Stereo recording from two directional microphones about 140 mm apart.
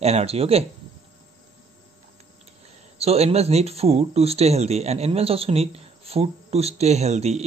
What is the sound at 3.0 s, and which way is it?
Speech, 45° right (ahead or behind).